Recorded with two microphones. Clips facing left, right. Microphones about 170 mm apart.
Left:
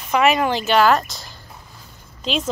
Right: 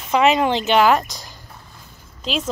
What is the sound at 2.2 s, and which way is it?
Speech, centre (ahead or behind).